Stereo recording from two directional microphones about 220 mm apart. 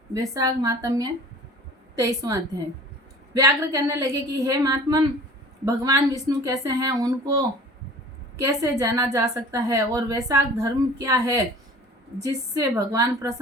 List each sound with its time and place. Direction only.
0.1 s a woman's voice: 15° right (ahead or behind)